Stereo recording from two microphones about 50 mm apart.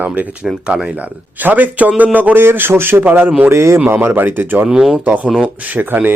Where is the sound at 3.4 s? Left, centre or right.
Right.